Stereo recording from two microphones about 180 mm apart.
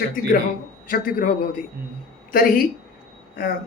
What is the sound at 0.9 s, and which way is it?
Speech, 50° left (ahead or behind).